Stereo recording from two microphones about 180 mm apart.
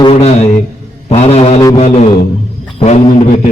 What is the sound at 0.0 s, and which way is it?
A man's voice, 35° left (ahead or behind).